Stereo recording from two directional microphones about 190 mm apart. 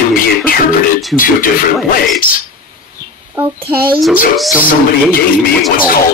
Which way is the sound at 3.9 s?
10° right (ahead or behind).